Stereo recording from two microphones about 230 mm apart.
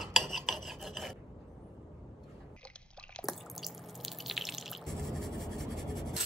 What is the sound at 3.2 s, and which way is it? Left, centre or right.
Drip, centre.